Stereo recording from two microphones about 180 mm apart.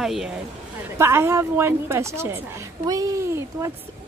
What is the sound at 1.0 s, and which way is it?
A woman's voice, 15° right (ahead or behind).